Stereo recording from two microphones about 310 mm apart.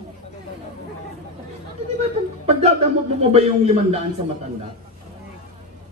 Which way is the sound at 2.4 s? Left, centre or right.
Right.